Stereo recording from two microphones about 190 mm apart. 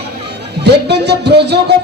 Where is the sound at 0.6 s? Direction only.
60° right (ahead or behind).